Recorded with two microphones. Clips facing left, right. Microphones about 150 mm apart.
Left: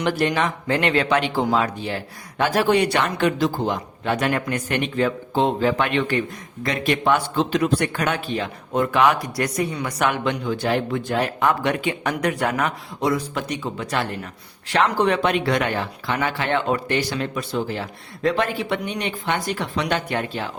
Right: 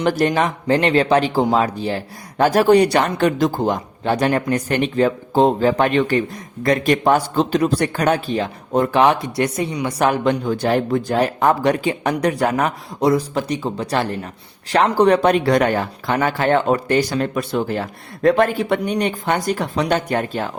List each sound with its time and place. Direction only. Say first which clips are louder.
0.0 s speech: right 4 dB; 40° right (ahead or behind)
4.0 s speech: right 4 dB; 35° right (ahead or behind)